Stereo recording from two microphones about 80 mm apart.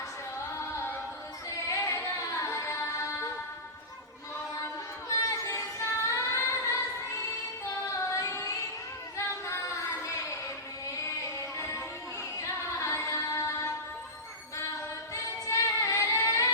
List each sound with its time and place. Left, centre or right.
0.5 s singing: left
1.5 s music: left
4.6 s child singing: left
7.9 s female singing: left
9.1 s child singing: left
11.3 s music: left
12.4 s female singing: left
14.5 s singing: left